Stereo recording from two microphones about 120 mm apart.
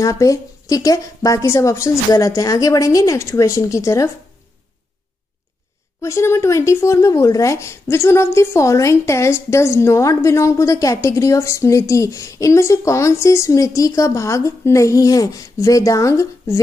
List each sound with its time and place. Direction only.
0.0 s speech: 25° left (ahead or behind)
5.9 s speech: 25° left (ahead or behind)